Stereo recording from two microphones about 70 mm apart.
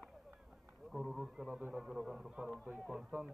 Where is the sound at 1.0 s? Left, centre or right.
Centre.